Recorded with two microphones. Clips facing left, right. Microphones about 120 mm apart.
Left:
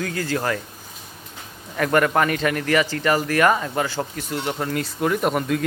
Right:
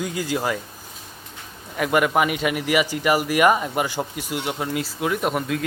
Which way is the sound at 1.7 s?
5° right (ahead or behind).